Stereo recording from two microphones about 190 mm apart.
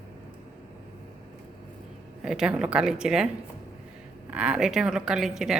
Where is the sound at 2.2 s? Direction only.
5° right (ahead or behind).